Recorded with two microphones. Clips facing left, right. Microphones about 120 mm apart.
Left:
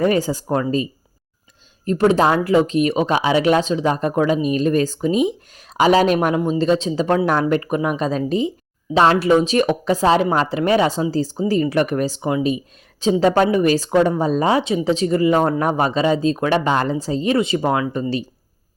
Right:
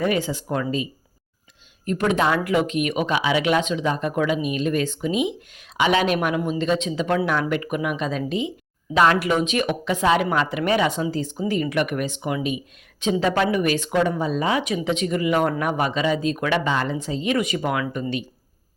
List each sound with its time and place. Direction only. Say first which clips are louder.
0.0 s speech: left 5 dB; 40° left (ahead or behind)